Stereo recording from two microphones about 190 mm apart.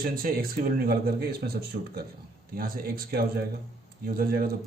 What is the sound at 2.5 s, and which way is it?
Speech, 50° right (ahead or behind).